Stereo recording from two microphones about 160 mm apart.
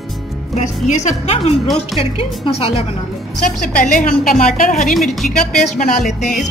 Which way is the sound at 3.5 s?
55° left (ahead or behind).